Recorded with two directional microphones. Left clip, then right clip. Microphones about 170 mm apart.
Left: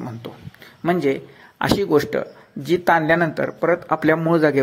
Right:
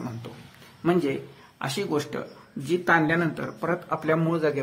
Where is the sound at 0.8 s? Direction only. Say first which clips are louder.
Left 5 dB; 35° left (ahead or behind).